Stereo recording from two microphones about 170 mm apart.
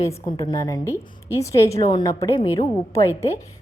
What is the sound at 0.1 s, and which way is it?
A woman's voice, 25° left (ahead or behind).